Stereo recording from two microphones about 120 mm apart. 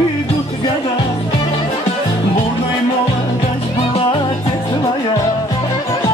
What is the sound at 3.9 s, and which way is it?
Music, 50° left (ahead or behind).